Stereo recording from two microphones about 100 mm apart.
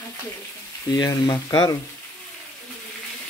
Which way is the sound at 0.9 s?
40° left (ahead or behind).